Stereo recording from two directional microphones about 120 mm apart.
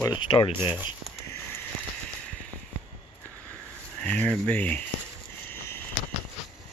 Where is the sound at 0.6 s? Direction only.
15° right (ahead or behind).